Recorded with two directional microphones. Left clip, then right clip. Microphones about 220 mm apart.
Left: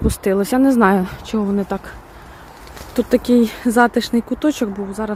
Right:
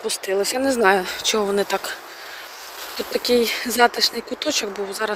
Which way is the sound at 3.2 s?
15° left (ahead or behind).